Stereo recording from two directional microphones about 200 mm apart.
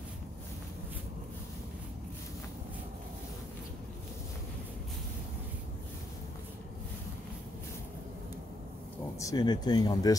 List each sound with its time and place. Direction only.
9.2 s speech: 20° left (ahead or behind)